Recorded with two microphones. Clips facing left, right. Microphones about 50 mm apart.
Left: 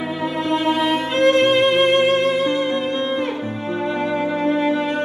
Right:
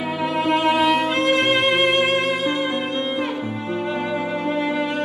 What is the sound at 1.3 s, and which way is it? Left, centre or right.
Music, right.